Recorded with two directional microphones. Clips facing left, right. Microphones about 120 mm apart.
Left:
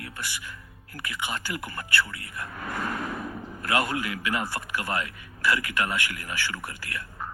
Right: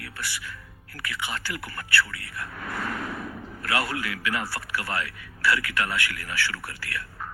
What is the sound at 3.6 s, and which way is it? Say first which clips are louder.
Speech: left 2 dB; 20° left (ahead or behind).